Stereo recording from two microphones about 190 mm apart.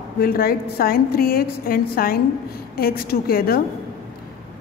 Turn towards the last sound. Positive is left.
turn(degrees=50)  # may be behind; listen again after turning